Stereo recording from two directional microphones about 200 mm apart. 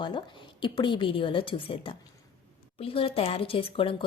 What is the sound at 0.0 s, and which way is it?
A woman's voice, 25° left (ahead or behind).